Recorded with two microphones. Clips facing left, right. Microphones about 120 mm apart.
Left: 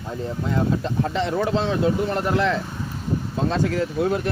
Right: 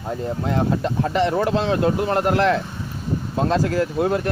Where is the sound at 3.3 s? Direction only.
90° right.